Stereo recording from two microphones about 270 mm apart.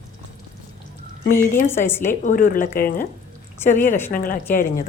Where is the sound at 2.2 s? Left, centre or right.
Left.